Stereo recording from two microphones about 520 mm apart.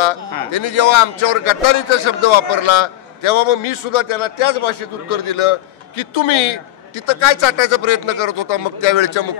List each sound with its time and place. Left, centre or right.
0.0 s a man's voice: left